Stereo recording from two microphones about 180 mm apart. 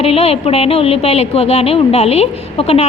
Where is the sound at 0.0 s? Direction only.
35° left (ahead or behind).